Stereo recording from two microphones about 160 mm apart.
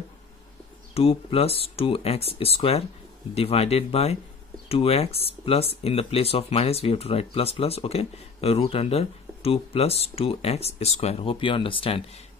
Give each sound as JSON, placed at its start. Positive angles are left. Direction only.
{"t": 0.9, "sound": "speech", "side_deg": 40}